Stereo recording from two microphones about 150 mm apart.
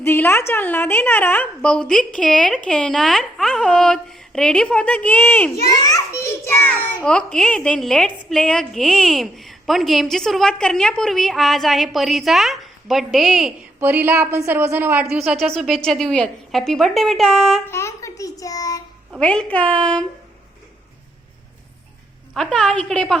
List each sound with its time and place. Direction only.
0.0 s a woman's voice: 15° left (ahead or behind)
5.8 s a woman's voice: 20° left (ahead or behind); by 13.5 s centre (ahead or behind)
13.7 s a woman's voice: 15° right (ahead or behind); by 17.6 s 5° left (ahead or behind)
17.7 s a child's voice: 20° left (ahead or behind)
19.2 s a woman's voice: 10° left (ahead or behind)
22.4 s a woman's voice: 5° left (ahead or behind)